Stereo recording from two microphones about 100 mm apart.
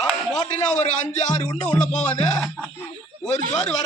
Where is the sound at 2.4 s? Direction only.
5° right (ahead or behind).